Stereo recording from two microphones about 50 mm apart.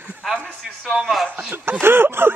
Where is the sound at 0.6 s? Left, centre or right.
Centre.